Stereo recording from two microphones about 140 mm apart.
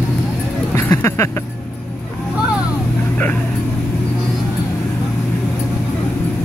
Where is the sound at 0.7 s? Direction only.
15° left (ahead or behind).